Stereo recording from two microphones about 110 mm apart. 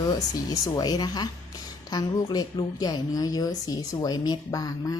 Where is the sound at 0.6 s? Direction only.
40° left (ahead or behind).